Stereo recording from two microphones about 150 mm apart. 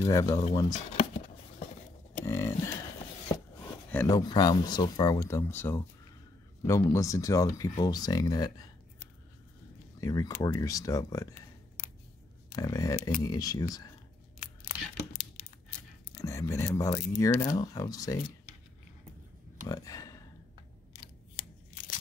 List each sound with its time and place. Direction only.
0.0 s speech: 25° left (ahead or behind)
0.7 s a sound: 40° left (ahead or behind)
2.2 s a sound: 20° left (ahead or behind)
4.1 s speech: 30° left (ahead or behind)
9.9 s speech: 20° left (ahead or behind)
11.8 s scissors: 60° left (ahead or behind)
12.5 s speech: 20° left (ahead or behind)
14.7 s a sound: 60° left (ahead or behind)
16.2 s speech: 20° left (ahead or behind)
19.7 s speech: 25° left (ahead or behind)